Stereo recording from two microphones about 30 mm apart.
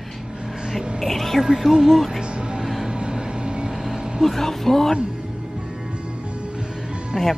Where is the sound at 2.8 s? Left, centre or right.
Right.